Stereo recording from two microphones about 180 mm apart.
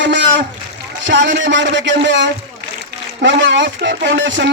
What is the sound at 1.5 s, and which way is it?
A man's voice, 85° right.